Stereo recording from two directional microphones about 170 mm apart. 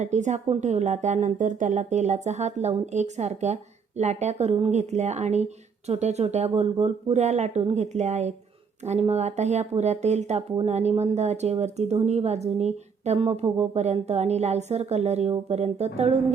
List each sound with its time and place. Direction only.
0.0 s a woman's voice: 45° right (ahead or behind)